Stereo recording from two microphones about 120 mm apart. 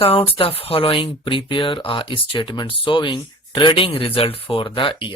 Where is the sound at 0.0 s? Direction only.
50° left (ahead or behind).